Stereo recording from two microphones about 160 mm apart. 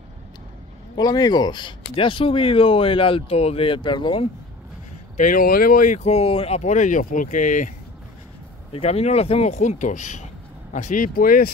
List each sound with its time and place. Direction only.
0.9 s speech: 25° left (ahead or behind)
5.1 s speech: 55° left (ahead or behind)
5.9 s speech: 40° left (ahead or behind)
8.7 s speech: 40° left (ahead or behind); by 11.5 s 65° left (ahead or behind)